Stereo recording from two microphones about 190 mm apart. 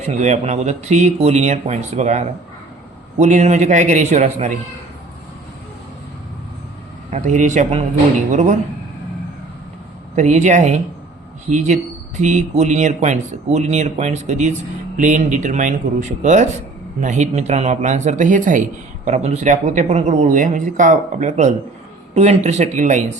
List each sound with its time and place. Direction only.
0.0 s speech: 35° right (ahead or behind)
7.1 s speech: 40° right (ahead or behind)
10.2 s speech: 40° right (ahead or behind)